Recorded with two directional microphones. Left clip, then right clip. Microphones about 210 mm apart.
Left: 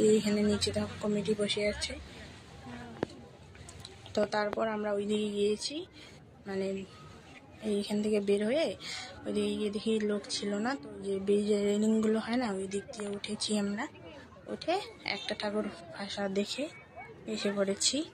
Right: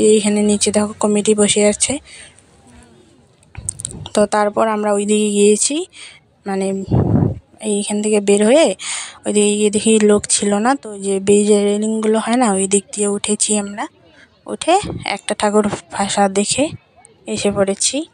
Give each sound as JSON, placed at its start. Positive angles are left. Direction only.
{"t": 0.0, "sound": "a woman's voice", "side_deg": -50}
{"t": 3.6, "sound": "a woman's voice", "side_deg": -60}